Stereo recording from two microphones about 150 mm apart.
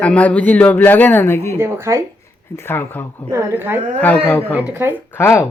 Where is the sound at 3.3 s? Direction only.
20° right (ahead or behind).